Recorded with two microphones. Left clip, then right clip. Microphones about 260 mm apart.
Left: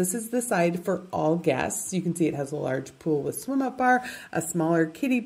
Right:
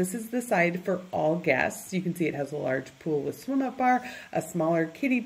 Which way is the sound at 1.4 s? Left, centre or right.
Left.